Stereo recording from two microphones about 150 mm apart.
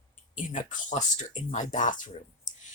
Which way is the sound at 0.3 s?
60° left (ahead or behind).